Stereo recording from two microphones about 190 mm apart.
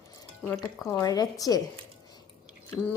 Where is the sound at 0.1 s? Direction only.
15° left (ahead or behind).